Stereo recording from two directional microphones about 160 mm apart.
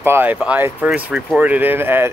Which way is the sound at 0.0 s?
15° right (ahead or behind).